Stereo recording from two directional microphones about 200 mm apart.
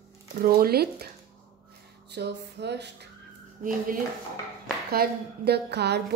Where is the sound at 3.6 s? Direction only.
45° right (ahead or behind).